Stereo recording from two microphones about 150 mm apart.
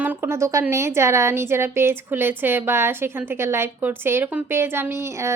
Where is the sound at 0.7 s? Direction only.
20° right (ahead or behind).